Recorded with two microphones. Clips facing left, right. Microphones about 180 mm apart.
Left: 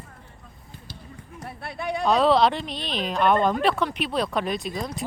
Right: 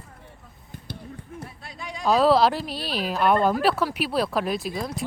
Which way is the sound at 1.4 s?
60° left (ahead or behind).